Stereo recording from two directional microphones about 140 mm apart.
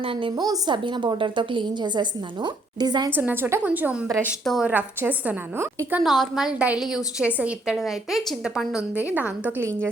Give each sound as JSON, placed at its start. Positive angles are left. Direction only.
{"t": 0.0, "sound": "a woman's voice", "side_deg": -40}
{"t": 3.2, "sound": "a woman's voice", "side_deg": -15}